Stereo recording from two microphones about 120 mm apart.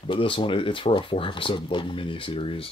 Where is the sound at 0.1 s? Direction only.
45° left (ahead or behind).